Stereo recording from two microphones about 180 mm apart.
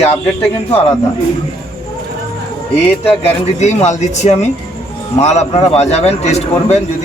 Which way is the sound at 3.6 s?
40° left (ahead or behind).